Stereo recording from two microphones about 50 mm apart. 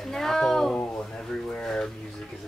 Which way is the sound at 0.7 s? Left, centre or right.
Left.